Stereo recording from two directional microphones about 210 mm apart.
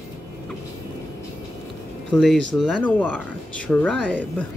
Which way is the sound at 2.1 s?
Centre (ahead or behind).